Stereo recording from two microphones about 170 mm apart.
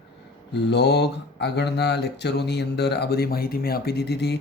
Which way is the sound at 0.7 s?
75° left (ahead or behind).